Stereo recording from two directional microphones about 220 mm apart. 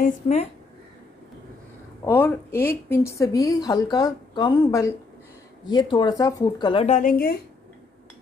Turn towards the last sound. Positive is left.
turn(degrees=40)  # may be behind; listen again after turning